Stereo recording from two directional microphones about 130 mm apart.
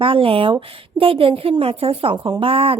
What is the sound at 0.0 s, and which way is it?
A woman's voice, 45° right (ahead or behind).